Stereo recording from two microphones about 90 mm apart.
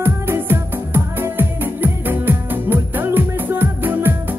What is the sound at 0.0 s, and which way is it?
Music, 25° right (ahead or behind).